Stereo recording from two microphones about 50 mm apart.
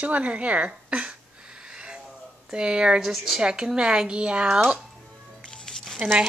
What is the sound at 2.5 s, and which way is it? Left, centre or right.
Speech, centre.